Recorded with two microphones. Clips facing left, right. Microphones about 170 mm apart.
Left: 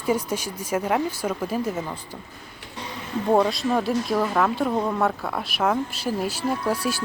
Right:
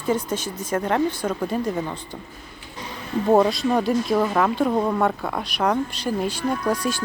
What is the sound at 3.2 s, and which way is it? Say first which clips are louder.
Speech: right 3 dB; 5° right (ahead or behind).